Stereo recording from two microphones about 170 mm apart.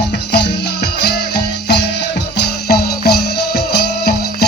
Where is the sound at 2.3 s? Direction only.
70° left (ahead or behind).